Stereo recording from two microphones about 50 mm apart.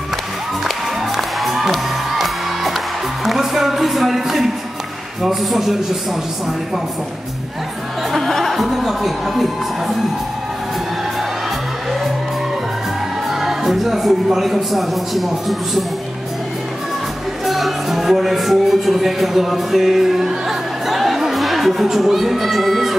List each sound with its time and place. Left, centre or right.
0.7 s music: centre
3.3 s a sound: centre
5.2 s speech: centre
8.1 s speech: centre
13.3 s speech: centre
17.5 s speech: centre
20.4 s music: centre